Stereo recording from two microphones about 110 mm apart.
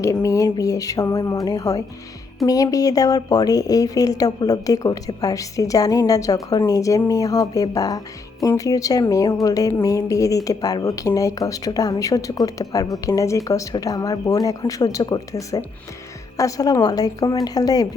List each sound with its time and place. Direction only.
0.0 s speech: 30° left (ahead or behind)